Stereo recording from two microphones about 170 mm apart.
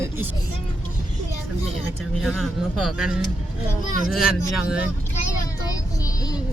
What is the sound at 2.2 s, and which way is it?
Speech, centre (ahead or behind).